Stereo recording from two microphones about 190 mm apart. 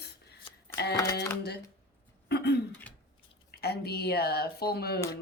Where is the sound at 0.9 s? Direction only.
15° left (ahead or behind).